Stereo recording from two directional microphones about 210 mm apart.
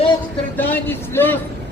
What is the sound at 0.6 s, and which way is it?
Speech, 10° left (ahead or behind).